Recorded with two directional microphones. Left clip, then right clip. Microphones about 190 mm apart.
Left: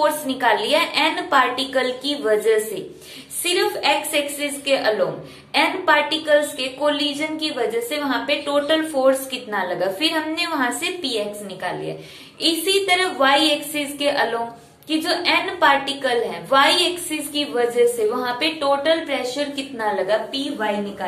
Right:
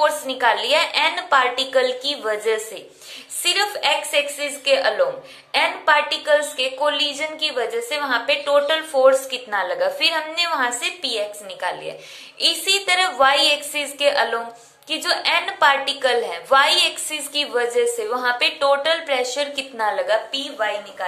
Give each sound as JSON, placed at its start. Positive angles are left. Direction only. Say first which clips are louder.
{"t": 0.0, "sound": "a woman's voice", "louder": "right 1 dB", "side_deg": -20}